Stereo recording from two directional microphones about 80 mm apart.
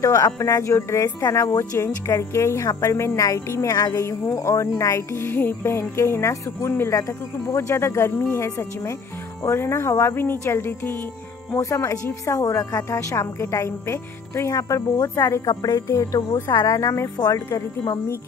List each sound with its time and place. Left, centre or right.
0.0 s speech: left
11.5 s speech: left
15.4 s speech: left